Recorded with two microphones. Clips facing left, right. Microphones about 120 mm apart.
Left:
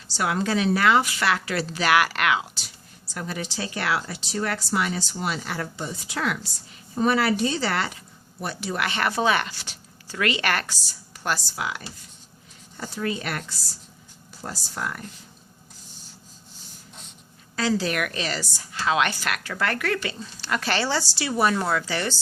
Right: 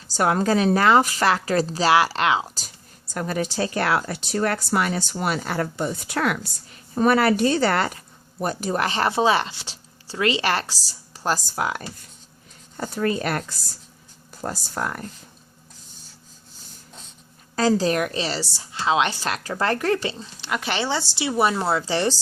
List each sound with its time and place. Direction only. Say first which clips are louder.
0.1 s speech: right 5 dB; 45° right (ahead or behind); by 2.5 s 30° right (ahead or behind)
3.2 s speech: right 6 dB; 50° right (ahead or behind)
17.6 s a woman's voice: right 5 dB; 40° right (ahead or behind)